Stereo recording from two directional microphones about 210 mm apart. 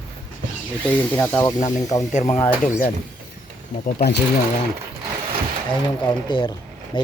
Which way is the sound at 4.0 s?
50° left (ahead or behind).